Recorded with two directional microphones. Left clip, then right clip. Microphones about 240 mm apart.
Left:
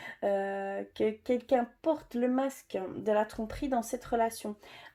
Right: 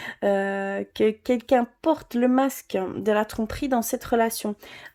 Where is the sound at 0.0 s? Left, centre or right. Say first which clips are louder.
Right 7 dB; right.